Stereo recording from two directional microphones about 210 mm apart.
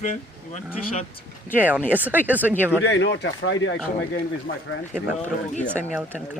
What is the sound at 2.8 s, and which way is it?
Speech, 55° left (ahead or behind).